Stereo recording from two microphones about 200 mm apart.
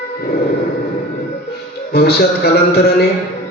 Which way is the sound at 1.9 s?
50° left (ahead or behind).